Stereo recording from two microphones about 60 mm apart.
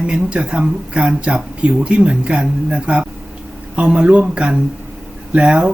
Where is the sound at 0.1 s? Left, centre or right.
Centre.